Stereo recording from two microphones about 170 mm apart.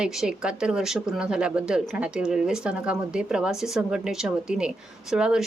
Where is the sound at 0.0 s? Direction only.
5° right (ahead or behind).